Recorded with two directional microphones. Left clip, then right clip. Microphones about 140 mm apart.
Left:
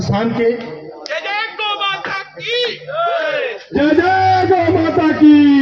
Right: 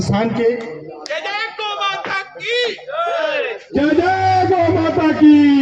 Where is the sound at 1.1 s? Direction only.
10° right (ahead or behind).